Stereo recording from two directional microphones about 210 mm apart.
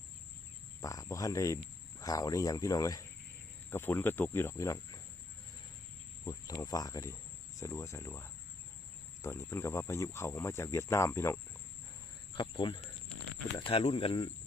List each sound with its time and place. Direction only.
0.8 s speech: 15° left (ahead or behind)
6.2 s speech: 15° left (ahead or behind)
12.3 s speech: 25° left (ahead or behind)